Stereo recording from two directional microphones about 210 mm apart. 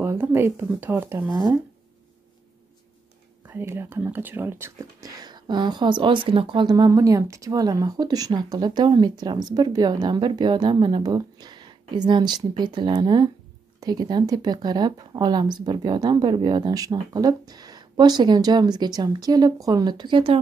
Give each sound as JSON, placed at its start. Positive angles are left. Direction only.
{"t": 0.0, "sound": "speech", "side_deg": -10}
{"t": 3.4, "sound": "speech", "side_deg": -10}